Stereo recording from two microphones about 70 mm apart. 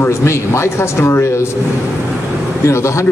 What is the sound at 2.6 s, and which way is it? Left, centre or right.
Speech, left.